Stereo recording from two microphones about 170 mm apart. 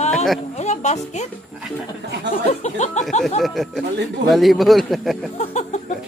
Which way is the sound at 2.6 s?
45° left (ahead or behind).